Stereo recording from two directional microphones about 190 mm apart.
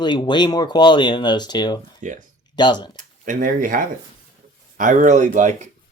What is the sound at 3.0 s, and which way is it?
Speech, 45° right (ahead or behind).